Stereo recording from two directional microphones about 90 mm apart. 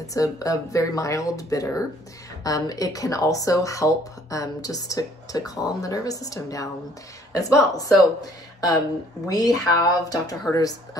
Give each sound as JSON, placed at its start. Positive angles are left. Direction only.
{"t": 0.0, "sound": "speech", "side_deg": 40}